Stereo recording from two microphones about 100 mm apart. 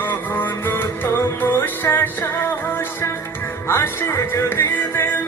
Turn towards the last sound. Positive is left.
turn(degrees=25)  # may be behind; listen again after turning